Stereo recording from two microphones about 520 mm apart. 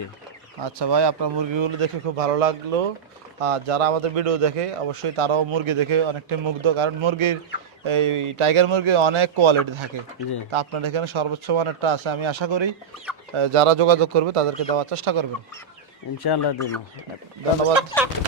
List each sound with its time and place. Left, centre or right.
0.6 s a man's voice: right
13.3 s speech: right
16.2 s speech: left
17.7 s speech: centre